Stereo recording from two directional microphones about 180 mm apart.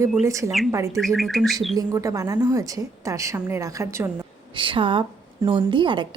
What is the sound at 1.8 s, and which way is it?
A woman's voice, 20° right (ahead or behind).